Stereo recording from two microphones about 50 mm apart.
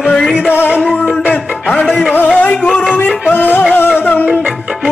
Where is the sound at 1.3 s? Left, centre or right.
Centre.